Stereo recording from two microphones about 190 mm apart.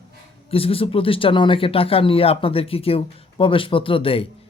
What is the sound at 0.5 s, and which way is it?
Speech, 30° left (ahead or behind).